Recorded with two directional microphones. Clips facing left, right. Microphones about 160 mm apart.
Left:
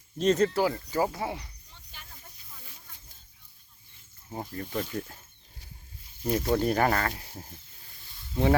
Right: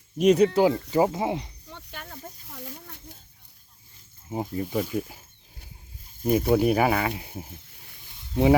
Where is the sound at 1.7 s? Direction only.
65° right (ahead or behind).